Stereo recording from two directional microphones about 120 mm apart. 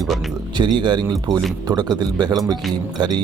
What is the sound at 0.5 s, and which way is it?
Speech, 40° right (ahead or behind).